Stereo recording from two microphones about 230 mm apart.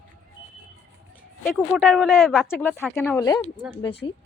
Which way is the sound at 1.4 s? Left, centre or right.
Centre.